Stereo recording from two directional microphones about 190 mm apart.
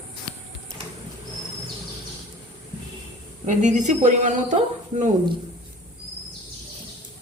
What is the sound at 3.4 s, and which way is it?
Speech, 40° right (ahead or behind).